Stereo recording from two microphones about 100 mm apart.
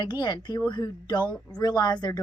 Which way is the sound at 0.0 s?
50° left (ahead or behind).